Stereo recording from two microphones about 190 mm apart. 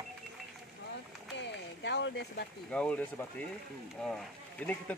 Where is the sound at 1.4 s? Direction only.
65° left (ahead or behind).